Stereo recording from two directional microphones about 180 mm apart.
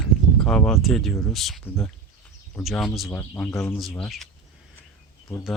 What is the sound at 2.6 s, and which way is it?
Speech, centre (ahead or behind).